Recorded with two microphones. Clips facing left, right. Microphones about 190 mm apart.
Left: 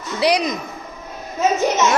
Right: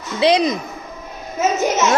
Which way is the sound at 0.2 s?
25° right (ahead or behind).